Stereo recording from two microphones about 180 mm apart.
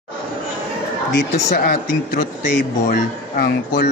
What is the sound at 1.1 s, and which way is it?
Speech, 55° left (ahead or behind).